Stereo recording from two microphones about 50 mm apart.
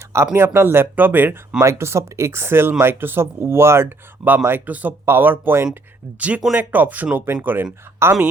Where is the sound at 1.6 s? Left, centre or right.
Right.